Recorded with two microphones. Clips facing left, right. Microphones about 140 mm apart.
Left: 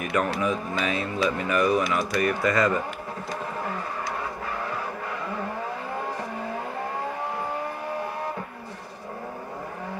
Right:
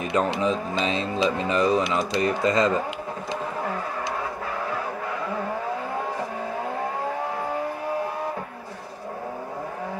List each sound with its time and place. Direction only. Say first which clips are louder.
0.0 s speech: right 2 dB; 25° right (ahead or behind)